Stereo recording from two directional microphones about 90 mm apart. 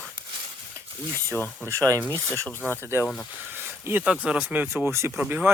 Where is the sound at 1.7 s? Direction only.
35° right (ahead or behind).